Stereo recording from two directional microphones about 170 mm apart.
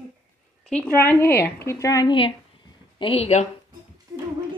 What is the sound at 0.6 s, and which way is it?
A woman's voice, 5° left (ahead or behind).